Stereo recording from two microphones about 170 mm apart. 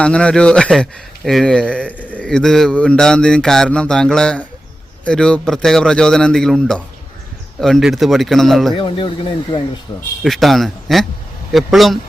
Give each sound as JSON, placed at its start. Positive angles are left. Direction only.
{"t": 0.0, "sound": "speech", "side_deg": 5}
{"t": 8.7, "sound": "speech", "side_deg": 30}
{"t": 10.2, "sound": "speech", "side_deg": 0}